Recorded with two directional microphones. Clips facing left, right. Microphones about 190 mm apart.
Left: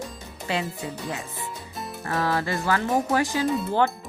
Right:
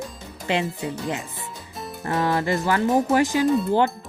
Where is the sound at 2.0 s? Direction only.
20° right (ahead or behind).